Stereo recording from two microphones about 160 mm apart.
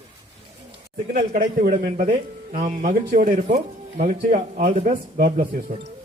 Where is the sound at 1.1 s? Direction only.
55° right (ahead or behind).